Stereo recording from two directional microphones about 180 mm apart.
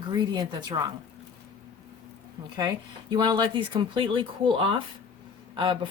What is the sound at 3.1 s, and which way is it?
Speech, 25° right (ahead or behind).